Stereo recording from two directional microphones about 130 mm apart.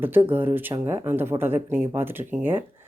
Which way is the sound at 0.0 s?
15° right (ahead or behind).